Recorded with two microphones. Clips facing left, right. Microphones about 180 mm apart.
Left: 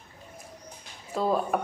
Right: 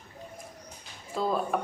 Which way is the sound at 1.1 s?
5° left (ahead or behind).